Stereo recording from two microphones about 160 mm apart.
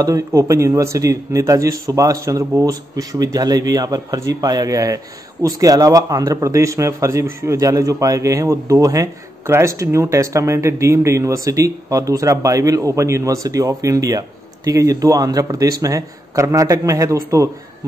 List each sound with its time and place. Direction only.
0.0 s a man's voice: 20° right (ahead or behind)